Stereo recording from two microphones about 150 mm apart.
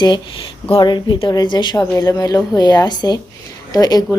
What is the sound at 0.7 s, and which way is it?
A woman's voice, 30° left (ahead or behind).